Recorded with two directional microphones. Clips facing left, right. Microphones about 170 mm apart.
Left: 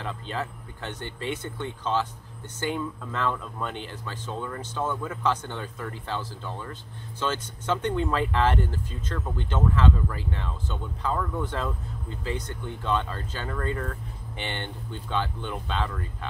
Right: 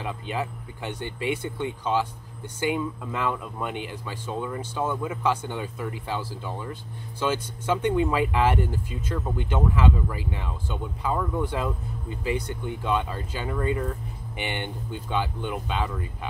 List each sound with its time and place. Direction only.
0.0 s speech: 10° right (ahead or behind)